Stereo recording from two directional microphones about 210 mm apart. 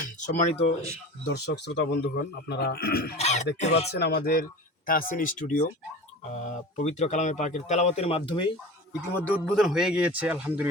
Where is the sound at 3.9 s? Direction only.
50° left (ahead or behind); by 8.4 s 25° left (ahead or behind).